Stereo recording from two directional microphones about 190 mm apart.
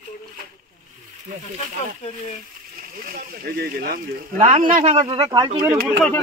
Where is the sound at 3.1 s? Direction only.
50° right (ahead or behind).